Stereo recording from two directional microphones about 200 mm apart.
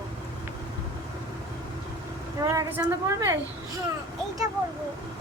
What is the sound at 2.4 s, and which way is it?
Speech, 15° right (ahead or behind).